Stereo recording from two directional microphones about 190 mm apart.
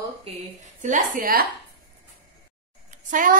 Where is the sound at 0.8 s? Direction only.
40° right (ahead or behind).